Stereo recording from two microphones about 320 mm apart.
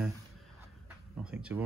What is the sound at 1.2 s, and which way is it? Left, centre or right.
Speech, centre.